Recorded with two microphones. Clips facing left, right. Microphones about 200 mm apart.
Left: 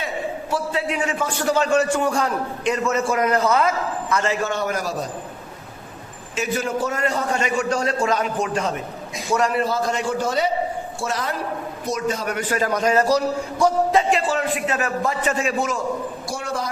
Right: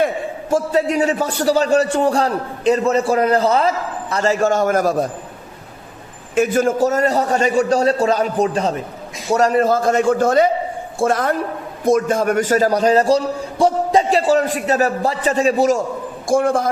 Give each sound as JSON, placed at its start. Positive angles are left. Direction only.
{"t": 0.5, "sound": "a man's voice", "side_deg": -40}
{"t": 6.3, "sound": "a man's voice", "side_deg": -50}
{"t": 16.2, "sound": "a man's voice", "side_deg": -50}